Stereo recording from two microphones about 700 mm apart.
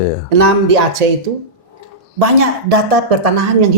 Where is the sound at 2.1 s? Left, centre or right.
Right.